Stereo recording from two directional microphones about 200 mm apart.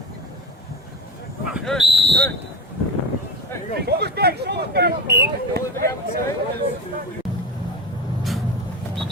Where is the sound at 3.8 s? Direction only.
55° right (ahead or behind).